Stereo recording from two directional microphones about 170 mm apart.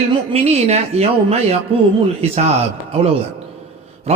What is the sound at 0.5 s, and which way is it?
A man's voice, 40° right (ahead or behind).